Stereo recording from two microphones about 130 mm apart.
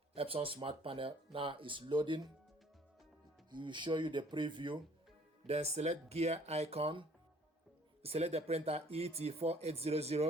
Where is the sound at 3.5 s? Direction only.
35° right (ahead or behind).